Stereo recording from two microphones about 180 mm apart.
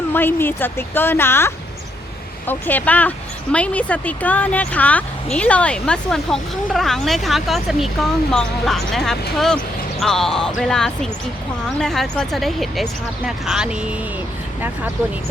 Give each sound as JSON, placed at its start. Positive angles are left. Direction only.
{"t": 0.1, "sound": "speech", "side_deg": 10}